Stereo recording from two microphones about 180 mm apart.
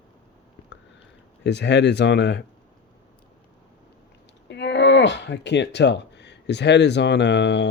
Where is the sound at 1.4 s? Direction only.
75° left (ahead or behind).